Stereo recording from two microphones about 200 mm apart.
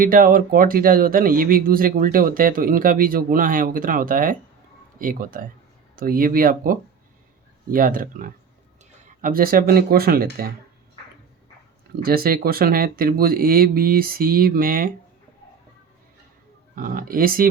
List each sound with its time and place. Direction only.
0.0 s speech: 45° right (ahead or behind)
12.0 s speech: 50° right (ahead or behind)
16.7 s speech: 45° right (ahead or behind)